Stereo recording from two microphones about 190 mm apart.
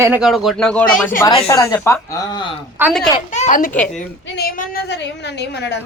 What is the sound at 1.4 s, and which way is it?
Speech, 15° left (ahead or behind).